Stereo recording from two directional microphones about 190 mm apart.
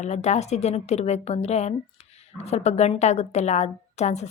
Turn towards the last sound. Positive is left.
turn(degrees=35)  # may be behind; listen again after turning